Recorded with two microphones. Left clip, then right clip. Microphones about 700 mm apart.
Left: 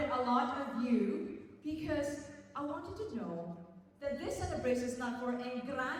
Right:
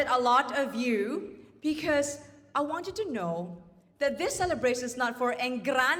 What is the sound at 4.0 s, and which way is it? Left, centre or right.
A woman's voice, right.